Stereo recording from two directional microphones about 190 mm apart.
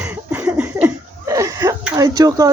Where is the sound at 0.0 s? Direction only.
5° right (ahead or behind).